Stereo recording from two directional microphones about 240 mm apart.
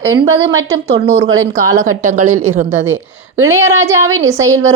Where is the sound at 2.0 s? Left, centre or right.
Right.